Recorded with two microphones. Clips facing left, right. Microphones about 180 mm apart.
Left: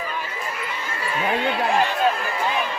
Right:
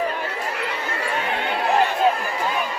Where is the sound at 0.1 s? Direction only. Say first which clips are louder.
Right 3 dB; 65° right (ahead or behind).